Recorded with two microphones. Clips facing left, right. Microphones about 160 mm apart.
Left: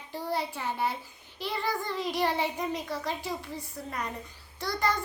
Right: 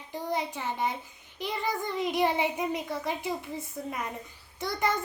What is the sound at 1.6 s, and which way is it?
Speech, 20° right (ahead or behind).